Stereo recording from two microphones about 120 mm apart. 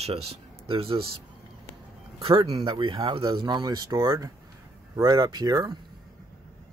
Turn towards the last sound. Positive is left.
turn(degrees=-30)  # may be behind; listen again after turning